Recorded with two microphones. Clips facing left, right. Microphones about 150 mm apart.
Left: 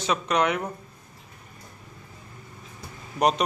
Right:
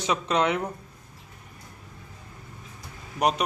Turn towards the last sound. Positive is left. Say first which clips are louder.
# left 2 dB
turn(degrees=-5)  # may be behind; listen again after turning